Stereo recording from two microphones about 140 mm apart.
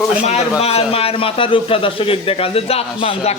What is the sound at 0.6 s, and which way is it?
Speech, 45° left (ahead or behind).